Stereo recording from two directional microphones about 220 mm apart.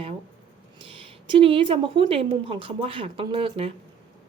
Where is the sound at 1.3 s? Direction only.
25° right (ahead or behind).